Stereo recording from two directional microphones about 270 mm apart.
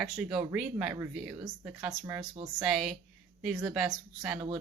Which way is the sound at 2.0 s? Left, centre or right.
Centre.